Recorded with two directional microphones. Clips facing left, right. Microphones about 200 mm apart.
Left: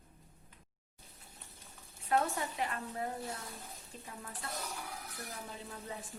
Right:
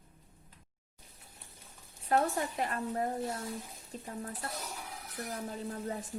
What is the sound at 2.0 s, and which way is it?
A woman's voice, 40° right (ahead or behind).